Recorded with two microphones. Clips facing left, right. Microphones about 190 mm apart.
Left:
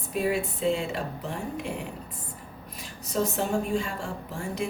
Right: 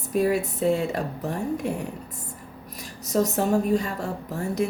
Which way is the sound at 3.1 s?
40° right (ahead or behind).